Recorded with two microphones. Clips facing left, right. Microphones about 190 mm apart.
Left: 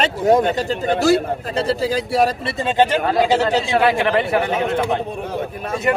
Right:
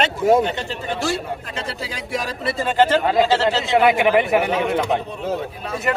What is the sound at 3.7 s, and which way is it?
Speech, 20° right (ahead or behind).